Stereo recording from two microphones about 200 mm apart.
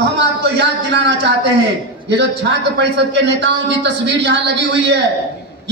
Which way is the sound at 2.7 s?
60° right (ahead or behind).